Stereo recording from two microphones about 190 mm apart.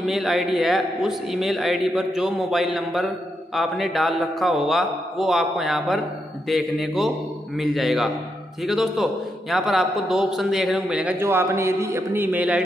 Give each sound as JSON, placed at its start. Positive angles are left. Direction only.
{"t": 0.0, "sound": "a man's voice", "side_deg": 0}